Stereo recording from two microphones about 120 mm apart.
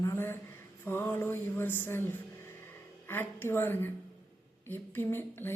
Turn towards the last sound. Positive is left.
turn(degrees=20)  # may be behind; listen again after turning